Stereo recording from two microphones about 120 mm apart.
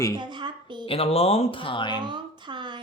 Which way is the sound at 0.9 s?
55° left (ahead or behind).